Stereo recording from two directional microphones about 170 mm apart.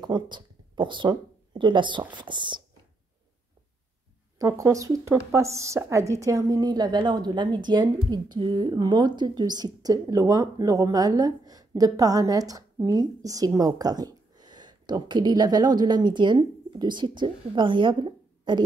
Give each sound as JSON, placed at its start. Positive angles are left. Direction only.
{"t": 0.0, "sound": "speech", "side_deg": -25}
{"t": 4.4, "sound": "speech", "side_deg": -20}